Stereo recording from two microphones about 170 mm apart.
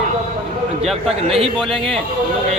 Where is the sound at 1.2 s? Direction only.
35° right (ahead or behind).